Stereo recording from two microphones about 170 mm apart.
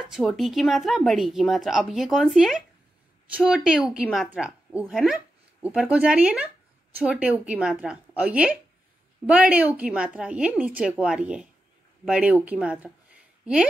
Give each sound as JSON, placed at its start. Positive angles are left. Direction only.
{"t": 0.0, "sound": "a woman's voice", "side_deg": 0}